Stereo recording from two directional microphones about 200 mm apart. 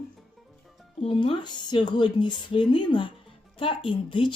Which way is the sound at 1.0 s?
25° left (ahead or behind).